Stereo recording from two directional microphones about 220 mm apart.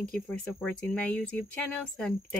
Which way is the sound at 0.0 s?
5° left (ahead or behind).